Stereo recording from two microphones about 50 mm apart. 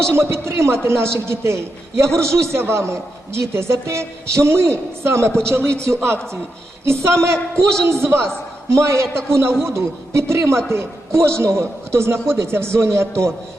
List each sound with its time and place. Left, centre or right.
0.1 s a man's voice: right
5.3 s a man's voice: centre
5.8 s a man's voice: right
7.9 s a man's voice: right
8.7 s a man's voice: right